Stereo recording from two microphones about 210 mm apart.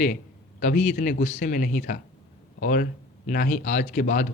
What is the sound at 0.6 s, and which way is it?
Speech, 35° left (ahead or behind).